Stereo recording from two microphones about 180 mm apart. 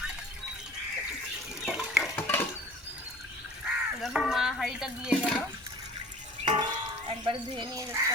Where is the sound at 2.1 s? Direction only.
10° left (ahead or behind).